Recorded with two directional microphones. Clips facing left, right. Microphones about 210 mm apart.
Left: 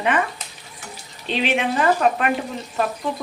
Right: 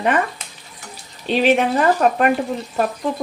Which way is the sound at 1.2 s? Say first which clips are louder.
Right 6 dB; 45° right (ahead or behind).